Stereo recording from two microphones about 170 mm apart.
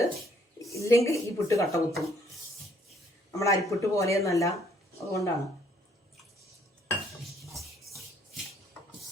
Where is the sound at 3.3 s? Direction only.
20° left (ahead or behind).